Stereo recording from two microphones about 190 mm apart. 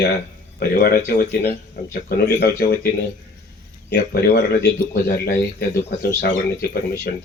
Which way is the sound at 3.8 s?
55° left (ahead or behind).